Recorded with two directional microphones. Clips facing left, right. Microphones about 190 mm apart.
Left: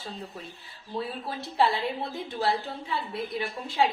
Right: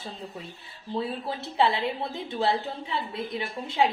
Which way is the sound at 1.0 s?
25° right (ahead or behind).